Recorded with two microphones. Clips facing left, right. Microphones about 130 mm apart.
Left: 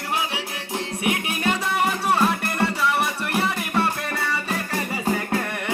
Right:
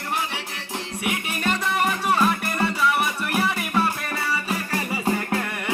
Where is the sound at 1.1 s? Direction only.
15° left (ahead or behind).